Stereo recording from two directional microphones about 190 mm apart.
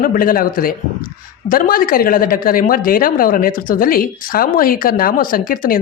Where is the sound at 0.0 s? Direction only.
45° left (ahead or behind).